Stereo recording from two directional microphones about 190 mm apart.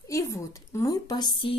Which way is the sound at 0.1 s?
15° left (ahead or behind).